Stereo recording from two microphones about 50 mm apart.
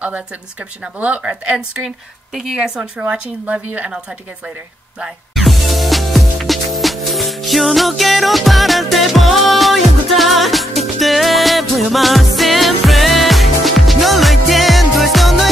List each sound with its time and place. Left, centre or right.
0.9 s a woman's voice: right
2.4 s a woman's voice: centre
5.3 s music: centre